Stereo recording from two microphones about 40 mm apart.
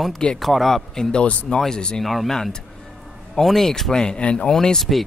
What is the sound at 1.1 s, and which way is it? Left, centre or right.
Speech, left.